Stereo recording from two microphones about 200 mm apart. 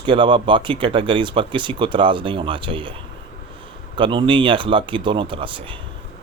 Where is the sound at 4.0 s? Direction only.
25° right (ahead or behind).